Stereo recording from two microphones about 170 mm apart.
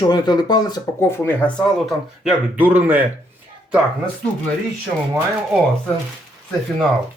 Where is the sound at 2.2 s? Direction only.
10° right (ahead or behind).